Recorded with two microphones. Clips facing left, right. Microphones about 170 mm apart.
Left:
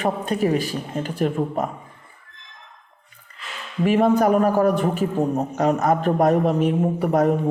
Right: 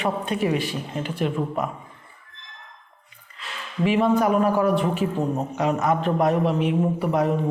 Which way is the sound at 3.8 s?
45° left (ahead or behind).